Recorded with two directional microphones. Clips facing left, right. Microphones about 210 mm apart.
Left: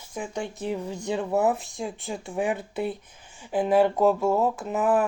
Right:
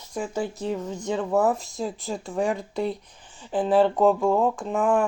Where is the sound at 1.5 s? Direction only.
Centre (ahead or behind).